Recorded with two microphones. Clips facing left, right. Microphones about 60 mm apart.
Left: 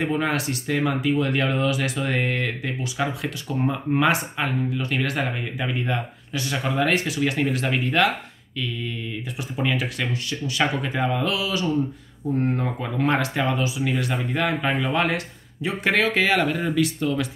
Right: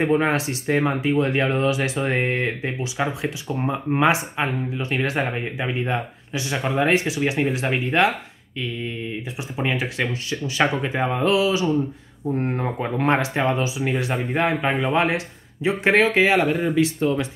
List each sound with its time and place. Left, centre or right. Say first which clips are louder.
0.0 s speech: right 4 dB; right
16.3 s speech: right 3 dB; centre